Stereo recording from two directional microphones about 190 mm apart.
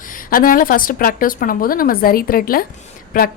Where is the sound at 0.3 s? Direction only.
45° left (ahead or behind).